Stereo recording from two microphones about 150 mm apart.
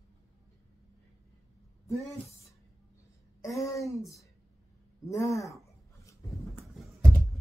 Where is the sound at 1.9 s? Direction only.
20° left (ahead or behind).